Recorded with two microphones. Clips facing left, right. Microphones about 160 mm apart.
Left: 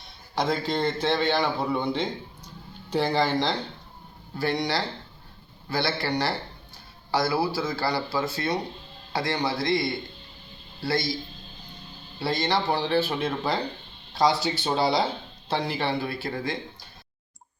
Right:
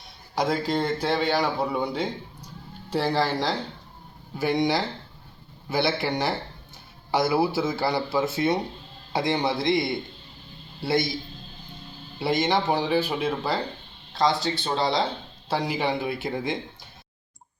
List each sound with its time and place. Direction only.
0.3 s speech: 10° right (ahead or behind)
4.4 s speech: 15° right (ahead or behind)
12.2 s speech: 20° right (ahead or behind); by 15.0 s 5° left (ahead or behind)
15.4 s speech: 10° right (ahead or behind)